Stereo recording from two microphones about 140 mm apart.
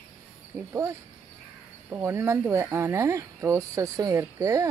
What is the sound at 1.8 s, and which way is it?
Speech, 20° right (ahead or behind).